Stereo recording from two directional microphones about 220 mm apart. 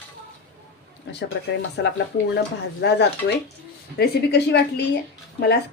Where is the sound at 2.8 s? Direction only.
50° left (ahead or behind).